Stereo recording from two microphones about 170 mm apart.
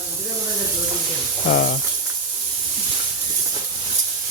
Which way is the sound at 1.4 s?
65° left (ahead or behind).